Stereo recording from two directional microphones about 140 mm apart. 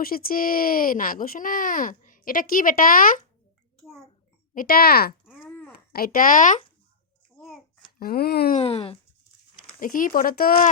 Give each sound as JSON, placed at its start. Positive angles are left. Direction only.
{"t": 0.0, "sound": "speech", "side_deg": 90}
{"t": 3.8, "sound": "a sound", "side_deg": 0}
{"t": 4.5, "sound": "speech", "side_deg": 90}
{"t": 5.5, "sound": "babbling", "side_deg": 10}
{"t": 5.9, "sound": "speech", "side_deg": 85}
{"t": 7.9, "sound": "speech", "side_deg": 90}
{"t": 8.5, "sound": "speech", "side_deg": 45}
{"t": 9.8, "sound": "speech", "side_deg": 80}